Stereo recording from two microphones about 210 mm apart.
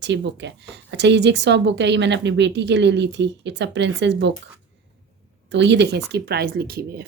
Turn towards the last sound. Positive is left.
turn(degrees=-45)  # may be behind; listen again after turning